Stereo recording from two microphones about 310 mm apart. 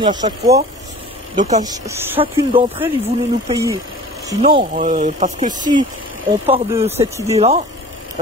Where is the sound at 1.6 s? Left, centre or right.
Centre.